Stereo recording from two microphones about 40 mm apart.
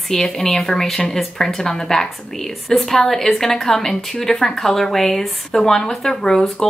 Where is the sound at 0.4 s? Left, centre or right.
Centre.